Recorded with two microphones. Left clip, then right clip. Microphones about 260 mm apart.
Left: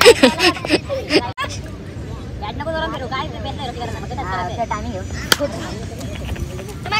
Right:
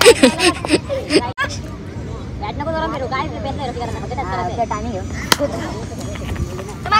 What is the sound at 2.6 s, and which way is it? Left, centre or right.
Vehicle, left.